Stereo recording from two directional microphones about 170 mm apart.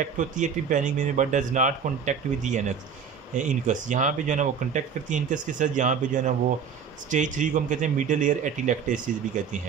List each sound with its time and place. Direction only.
0.4 s speech: 50° right (ahead or behind)